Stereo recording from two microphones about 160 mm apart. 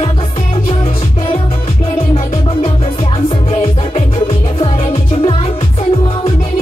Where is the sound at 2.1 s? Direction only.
40° left (ahead or behind).